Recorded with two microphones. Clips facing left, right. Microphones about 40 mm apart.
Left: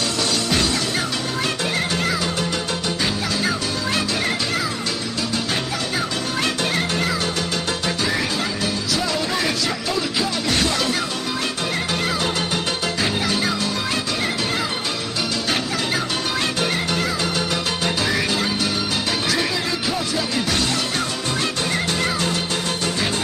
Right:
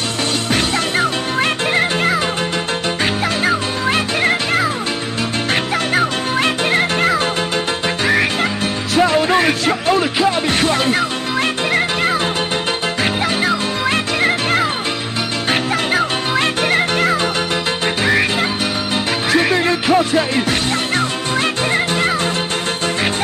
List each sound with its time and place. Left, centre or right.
0.5 s music: right
3.4 s music: right
6.3 s music: right
14.2 s music: right
15.9 s music: right
21.7 s music: right